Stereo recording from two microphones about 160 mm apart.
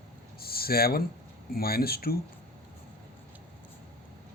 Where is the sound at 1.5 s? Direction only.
70° left (ahead or behind).